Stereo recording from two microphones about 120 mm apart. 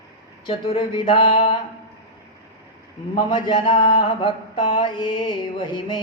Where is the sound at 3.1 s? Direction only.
45° left (ahead or behind).